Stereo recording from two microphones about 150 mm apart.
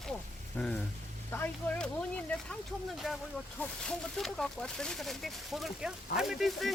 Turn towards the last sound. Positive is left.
turn(degrees=0)  # may be behind; listen again after turning